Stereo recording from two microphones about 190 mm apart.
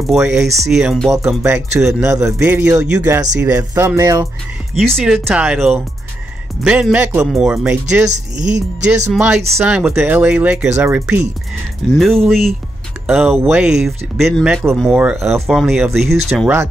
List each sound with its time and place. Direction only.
0.0 s speech: centre (ahead or behind)
2.0 s speech: 15° right (ahead or behind)
4.7 s speech: centre (ahead or behind)
8.1 s speech: 40° right (ahead or behind)
9.1 s speech: 5° right (ahead or behind)